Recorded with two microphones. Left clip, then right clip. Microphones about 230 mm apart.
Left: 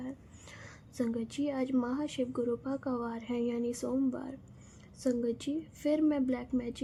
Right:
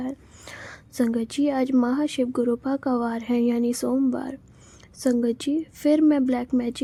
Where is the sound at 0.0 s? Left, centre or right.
Right.